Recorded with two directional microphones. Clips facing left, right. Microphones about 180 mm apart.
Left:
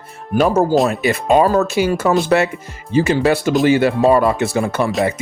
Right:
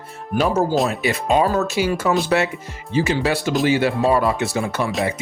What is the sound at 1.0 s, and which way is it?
Speech, 50° left (ahead or behind).